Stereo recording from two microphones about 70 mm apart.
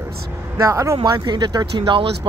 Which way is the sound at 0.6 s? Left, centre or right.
Right.